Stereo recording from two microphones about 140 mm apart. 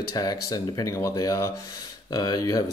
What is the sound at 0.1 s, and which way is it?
Speech, 25° left (ahead or behind).